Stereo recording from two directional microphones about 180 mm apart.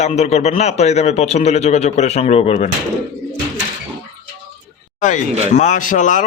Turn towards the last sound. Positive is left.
turn(degrees=45)  # may be behind; listen again after turning